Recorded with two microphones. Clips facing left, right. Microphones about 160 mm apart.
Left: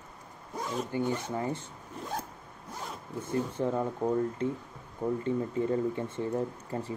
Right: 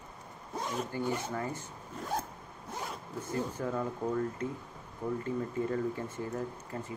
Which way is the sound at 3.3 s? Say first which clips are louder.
Left 4 dB; 25° left (ahead or behind).